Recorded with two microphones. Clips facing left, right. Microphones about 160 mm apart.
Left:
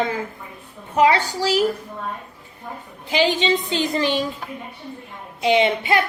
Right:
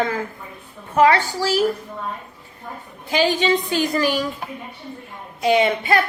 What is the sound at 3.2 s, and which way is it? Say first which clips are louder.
A woman's voice: right 1 dB; 20° left (ahead or behind).